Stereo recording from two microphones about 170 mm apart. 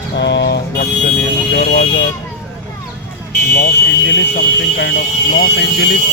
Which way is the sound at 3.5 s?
70° left (ahead or behind).